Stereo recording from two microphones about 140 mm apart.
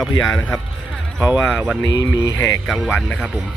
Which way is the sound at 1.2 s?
10° right (ahead or behind).